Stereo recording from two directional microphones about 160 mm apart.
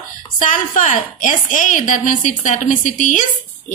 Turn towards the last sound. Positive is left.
turn(degrees=50)  # may be behind; listen again after turning